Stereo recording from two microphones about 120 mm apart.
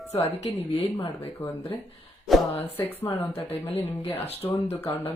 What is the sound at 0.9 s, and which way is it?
Speech, 25° left (ahead or behind).